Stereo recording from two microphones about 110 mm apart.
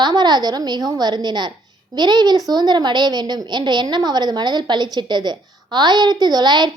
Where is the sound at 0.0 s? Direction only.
40° right (ahead or behind).